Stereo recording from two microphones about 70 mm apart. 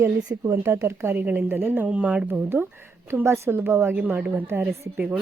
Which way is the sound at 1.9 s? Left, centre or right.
Centre.